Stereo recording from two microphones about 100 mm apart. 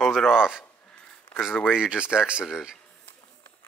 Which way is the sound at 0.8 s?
10° left (ahead or behind).